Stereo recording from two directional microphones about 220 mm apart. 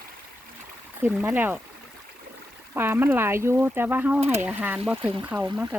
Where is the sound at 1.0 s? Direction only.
5° right (ahead or behind).